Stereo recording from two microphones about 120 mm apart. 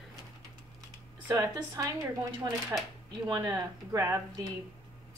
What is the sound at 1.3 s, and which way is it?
Speech, 30° right (ahead or behind).